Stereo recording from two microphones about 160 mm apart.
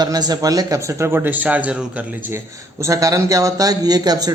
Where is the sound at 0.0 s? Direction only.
25° right (ahead or behind); by 1.7 s 10° right (ahead or behind).